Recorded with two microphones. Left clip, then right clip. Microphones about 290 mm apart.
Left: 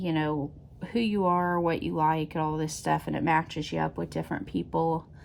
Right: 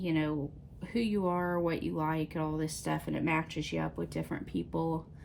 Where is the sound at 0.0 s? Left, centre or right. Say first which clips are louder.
Left 4 dB; left.